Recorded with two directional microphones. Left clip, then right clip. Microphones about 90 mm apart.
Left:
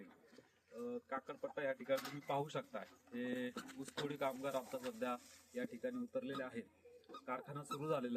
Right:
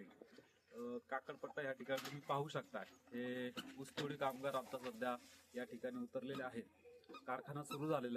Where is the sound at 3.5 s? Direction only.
25° left (ahead or behind).